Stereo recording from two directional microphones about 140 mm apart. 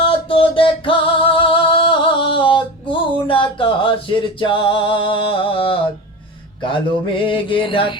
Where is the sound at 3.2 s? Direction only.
40° left (ahead or behind).